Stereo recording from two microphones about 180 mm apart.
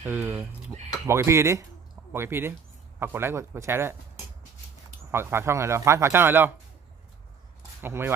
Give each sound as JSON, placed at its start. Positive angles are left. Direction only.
{"t": 0.0, "sound": "speech", "side_deg": -10}
{"t": 5.1, "sound": "speech", "side_deg": -15}
{"t": 7.8, "sound": "speech", "side_deg": -10}